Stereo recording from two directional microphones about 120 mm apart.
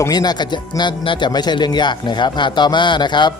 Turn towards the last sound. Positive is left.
turn(degrees=40)  # may be behind; listen again after turning